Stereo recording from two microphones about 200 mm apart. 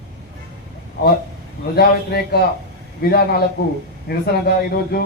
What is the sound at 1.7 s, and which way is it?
Speech, 50° left (ahead or behind).